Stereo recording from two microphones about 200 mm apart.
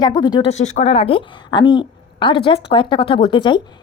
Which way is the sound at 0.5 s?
35° left (ahead or behind).